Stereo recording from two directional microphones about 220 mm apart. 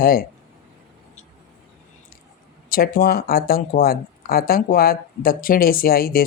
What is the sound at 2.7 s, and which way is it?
Speech, 40° left (ahead or behind).